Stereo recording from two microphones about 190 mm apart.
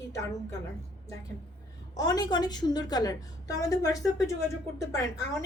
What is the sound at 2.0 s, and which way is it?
A woman's voice, 20° left (ahead or behind).